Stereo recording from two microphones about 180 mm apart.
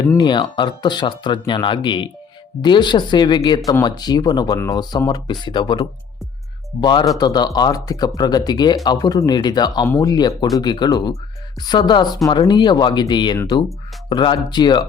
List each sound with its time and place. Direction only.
0.0 s speech: 25° left (ahead or behind)